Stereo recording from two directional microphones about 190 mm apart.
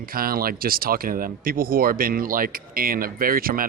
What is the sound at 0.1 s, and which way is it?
Speech, 50° right (ahead or behind).